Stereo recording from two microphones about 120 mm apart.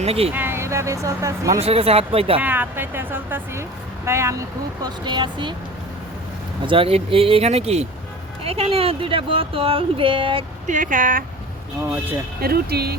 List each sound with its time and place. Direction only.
0.0 s speech: 55° right (ahead or behind)
0.3 s speech: 20° right (ahead or behind)
1.5 s speech: 55° right (ahead or behind)
2.4 s a woman's voice: 15° right (ahead or behind)
4.8 s speech: 40° right (ahead or behind)
6.7 s speech: 50° right (ahead or behind)
10.7 s speech: 90° right
11.8 s a woman's voice: 20° right (ahead or behind)